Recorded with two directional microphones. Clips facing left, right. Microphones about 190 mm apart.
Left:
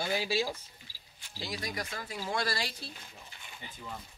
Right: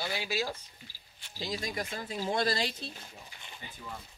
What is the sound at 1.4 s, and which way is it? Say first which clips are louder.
Speech: right 2 dB; 20° right (ahead or behind).